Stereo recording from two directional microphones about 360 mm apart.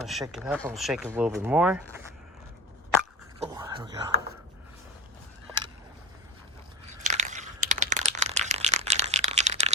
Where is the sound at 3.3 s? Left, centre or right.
Centre.